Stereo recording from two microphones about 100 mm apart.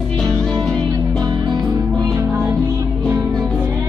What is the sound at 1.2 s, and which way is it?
Music, 40° right (ahead or behind).